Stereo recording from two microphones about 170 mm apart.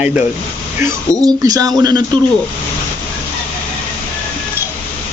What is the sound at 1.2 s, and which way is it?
Speech, 20° right (ahead or behind).